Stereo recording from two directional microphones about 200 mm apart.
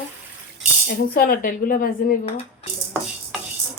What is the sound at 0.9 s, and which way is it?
Speech, 45° left (ahead or behind).